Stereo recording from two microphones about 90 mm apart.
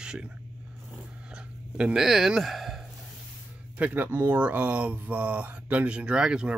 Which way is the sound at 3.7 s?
15° right (ahead or behind).